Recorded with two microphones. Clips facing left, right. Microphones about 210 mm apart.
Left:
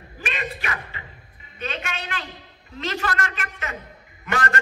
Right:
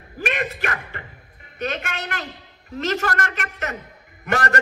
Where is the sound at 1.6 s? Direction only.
50° right (ahead or behind).